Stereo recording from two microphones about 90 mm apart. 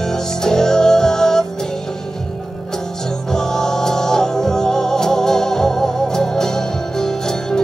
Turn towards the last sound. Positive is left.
turn(degrees=5)  # may be behind; listen again after turning